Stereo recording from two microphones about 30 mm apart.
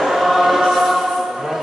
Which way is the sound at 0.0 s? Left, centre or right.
Centre.